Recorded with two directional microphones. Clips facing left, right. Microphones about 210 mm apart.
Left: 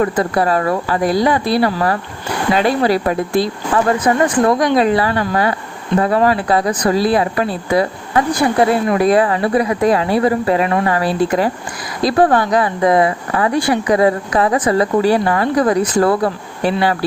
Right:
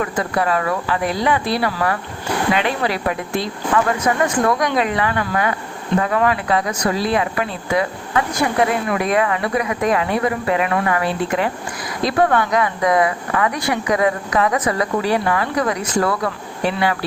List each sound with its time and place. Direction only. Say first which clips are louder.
0.0 s speech: left 5 dB; 35° left (ahead or behind)